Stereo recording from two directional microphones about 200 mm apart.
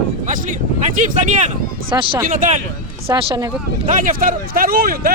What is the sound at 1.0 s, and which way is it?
Speech, 40° right (ahead or behind).